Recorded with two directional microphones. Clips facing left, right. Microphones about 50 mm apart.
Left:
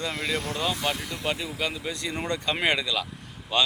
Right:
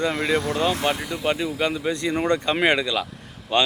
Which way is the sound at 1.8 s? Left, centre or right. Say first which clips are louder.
Right 8 dB; right.